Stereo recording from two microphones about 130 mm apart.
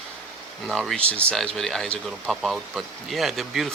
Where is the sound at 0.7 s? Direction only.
5° left (ahead or behind).